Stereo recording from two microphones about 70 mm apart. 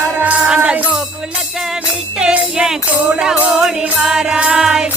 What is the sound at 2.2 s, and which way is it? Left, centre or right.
Music, centre.